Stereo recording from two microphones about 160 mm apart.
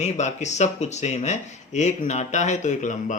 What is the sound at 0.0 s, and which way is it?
Speech, 45° left (ahead or behind).